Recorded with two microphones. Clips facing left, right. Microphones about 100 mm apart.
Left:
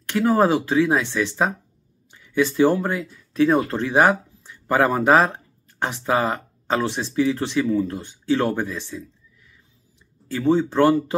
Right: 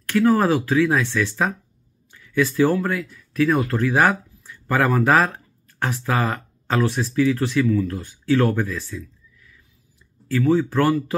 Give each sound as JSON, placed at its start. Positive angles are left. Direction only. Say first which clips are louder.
{"t": 0.0, "sound": "speech", "louder": "right 1 dB", "side_deg": 20}